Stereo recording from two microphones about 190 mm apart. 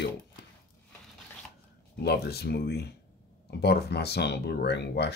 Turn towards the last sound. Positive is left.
turn(degrees=60)  # may be behind; listen again after turning